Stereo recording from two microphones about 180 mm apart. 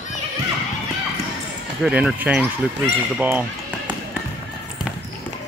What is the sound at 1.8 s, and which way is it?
Speech, 5° right (ahead or behind).